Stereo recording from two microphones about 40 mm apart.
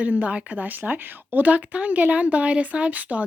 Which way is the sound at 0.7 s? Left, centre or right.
Right.